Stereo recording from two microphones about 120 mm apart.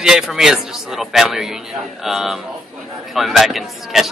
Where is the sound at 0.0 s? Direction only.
5° right (ahead or behind).